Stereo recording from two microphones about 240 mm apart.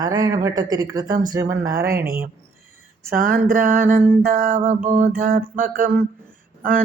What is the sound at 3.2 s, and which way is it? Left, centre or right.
Music, right.